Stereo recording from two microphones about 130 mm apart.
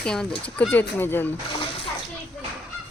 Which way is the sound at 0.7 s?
15° left (ahead or behind).